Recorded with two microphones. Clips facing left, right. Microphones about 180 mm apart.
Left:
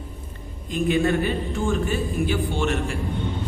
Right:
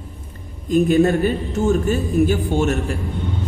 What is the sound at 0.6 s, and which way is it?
A man's voice, 45° right (ahead or behind).